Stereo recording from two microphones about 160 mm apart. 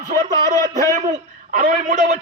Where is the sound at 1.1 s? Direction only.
50° right (ahead or behind).